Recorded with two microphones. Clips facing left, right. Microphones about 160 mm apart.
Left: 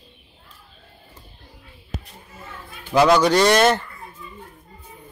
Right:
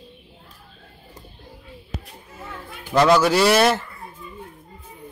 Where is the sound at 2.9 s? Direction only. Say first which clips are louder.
Left 1 dB; centre (ahead or behind).